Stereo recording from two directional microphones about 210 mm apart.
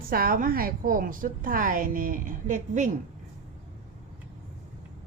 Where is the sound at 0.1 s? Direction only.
45° right (ahead or behind).